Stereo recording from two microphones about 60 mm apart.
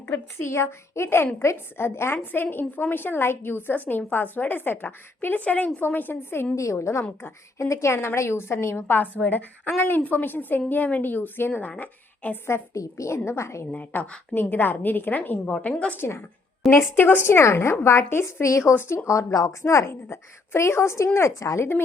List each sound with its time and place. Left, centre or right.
0.1 s speech: left
2.1 s a woman's voice: left
6.6 s a woman's voice: left
12.7 s a woman's voice: left
13.7 s a woman's voice: left
15.5 s a woman's voice: centre
16.0 s a woman's voice: left
17.4 s speech: left
18.7 s a woman's voice: left
19.0 s a woman's voice: left
19.9 s speech: left